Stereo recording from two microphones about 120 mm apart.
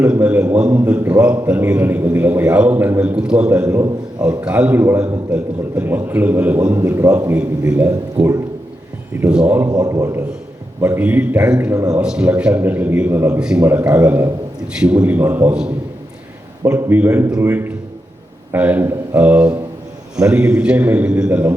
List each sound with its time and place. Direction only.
0.0 s a man's voice: 10° right (ahead or behind); by 7.3 s 25° right (ahead or behind)
9.2 s a man's voice: 10° right (ahead or behind)
9.6 s a man's voice: 30° right (ahead or behind); by 11.7 s 10° right (ahead or behind)
11.7 s a man's voice: 25° right (ahead or behind)
11.9 s a man's voice: 5° right (ahead or behind)
13.4 s a man's voice: 5° right (ahead or behind)